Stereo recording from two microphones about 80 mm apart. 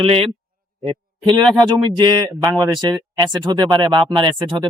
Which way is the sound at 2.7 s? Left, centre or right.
Right.